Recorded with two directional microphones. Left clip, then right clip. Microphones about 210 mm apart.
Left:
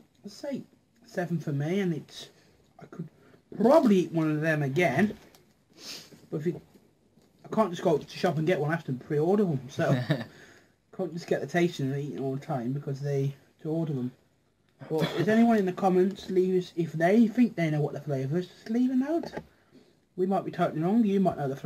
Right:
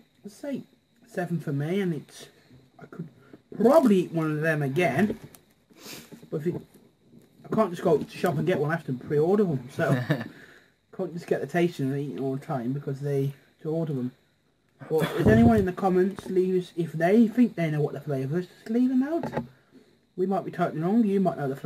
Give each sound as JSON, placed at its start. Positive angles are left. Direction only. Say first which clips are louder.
{"t": 1.0, "sound": "speech", "louder": "right 1 dB", "side_deg": -5}
{"t": 3.5, "sound": "speech", "louder": "right 2 dB", "side_deg": 0}
{"t": 5.3, "sound": "a sound", "louder": "right 2 dB", "side_deg": -20}
{"t": 6.5, "sound": "speech", "louder": "right 2 dB", "side_deg": 0}
{"t": 9.8, "sound": "a man's voice", "louder": "right 1 dB", "side_deg": -15}
{"t": 10.9, "sound": "speech", "louder": "right 1 dB", "side_deg": -5}
{"t": 15.0, "sound": "a man's voice", "louder": "right 3 dB", "side_deg": -15}
{"t": 15.2, "sound": "speech", "louder": "right 3 dB", "side_deg": 0}